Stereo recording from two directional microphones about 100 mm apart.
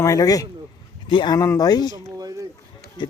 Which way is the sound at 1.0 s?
55° left (ahead or behind).